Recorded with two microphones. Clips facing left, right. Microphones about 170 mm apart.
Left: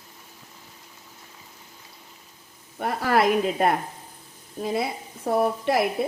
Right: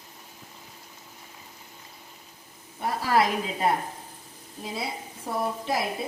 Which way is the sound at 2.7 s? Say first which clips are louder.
Left 2 dB; 60° left (ahead or behind).